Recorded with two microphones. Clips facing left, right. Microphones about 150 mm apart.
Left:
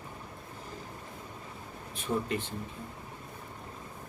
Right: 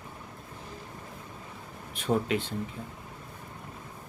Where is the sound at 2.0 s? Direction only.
75° right (ahead or behind).